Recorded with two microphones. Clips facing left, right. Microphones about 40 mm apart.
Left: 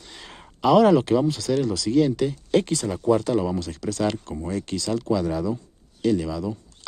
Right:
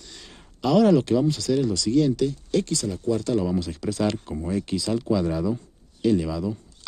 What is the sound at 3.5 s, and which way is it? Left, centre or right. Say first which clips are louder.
Speech: right 1 dB; centre.